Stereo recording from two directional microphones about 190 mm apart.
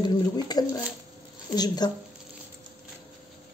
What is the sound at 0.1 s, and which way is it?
A woman's voice, 20° left (ahead or behind).